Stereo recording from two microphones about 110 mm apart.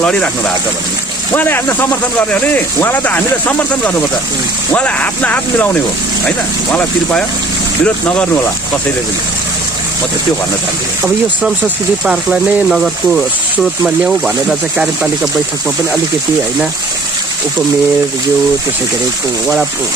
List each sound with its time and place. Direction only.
0.0 s speech: 10° left (ahead or behind)
1.3 s speech: 20° left (ahead or behind)
12.1 s speech: 5° right (ahead or behind)